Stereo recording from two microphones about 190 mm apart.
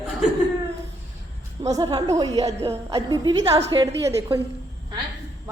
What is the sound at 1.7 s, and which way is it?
A woman's voice, 25° right (ahead or behind).